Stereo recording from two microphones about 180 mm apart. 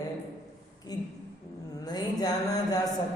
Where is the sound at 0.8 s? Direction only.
25° left (ahead or behind).